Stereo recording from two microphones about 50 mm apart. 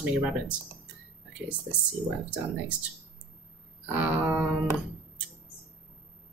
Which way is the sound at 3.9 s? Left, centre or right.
Right.